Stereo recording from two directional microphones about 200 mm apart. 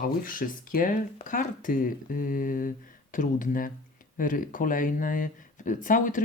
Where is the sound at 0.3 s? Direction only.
45° left (ahead or behind).